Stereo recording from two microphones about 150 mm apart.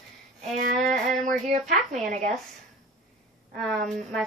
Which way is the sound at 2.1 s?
50° right (ahead or behind).